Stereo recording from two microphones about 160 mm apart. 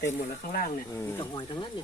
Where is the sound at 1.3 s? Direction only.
30° left (ahead or behind).